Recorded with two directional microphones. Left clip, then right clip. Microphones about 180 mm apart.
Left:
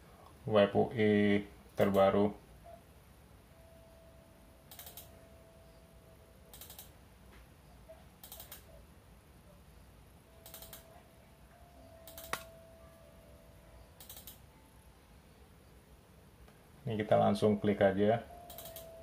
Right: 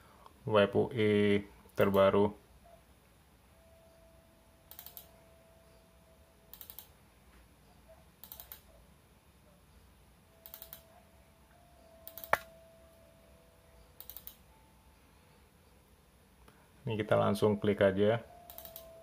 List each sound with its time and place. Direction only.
0.5 s speech: 30° right (ahead or behind)
16.8 s speech: 30° right (ahead or behind)